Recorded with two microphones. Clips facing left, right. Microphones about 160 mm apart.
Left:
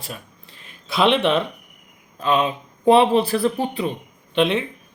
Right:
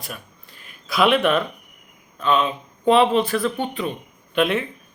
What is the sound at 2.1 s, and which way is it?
A man's voice, 35° left (ahead or behind).